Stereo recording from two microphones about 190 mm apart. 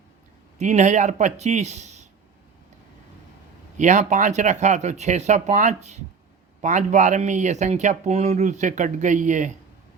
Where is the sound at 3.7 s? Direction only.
40° right (ahead or behind).